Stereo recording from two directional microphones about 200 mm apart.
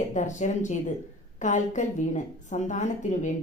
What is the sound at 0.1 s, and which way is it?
A woman's voice, 35° left (ahead or behind).